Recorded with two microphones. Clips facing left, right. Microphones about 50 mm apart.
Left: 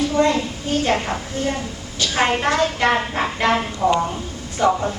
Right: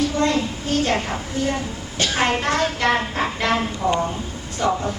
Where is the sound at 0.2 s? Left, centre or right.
Centre.